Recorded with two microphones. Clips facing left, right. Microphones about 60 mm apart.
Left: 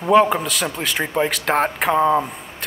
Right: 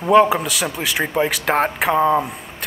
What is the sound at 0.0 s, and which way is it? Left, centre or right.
Speech, centre.